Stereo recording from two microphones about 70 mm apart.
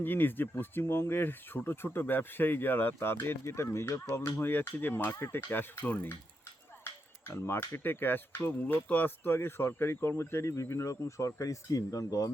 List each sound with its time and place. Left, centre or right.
0.0 s speech: left